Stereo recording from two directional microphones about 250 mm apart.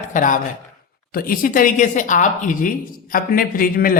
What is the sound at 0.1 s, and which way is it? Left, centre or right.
A woman's voice, left.